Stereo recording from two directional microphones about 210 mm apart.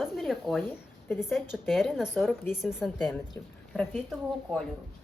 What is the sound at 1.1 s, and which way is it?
A woman's voice, centre (ahead or behind).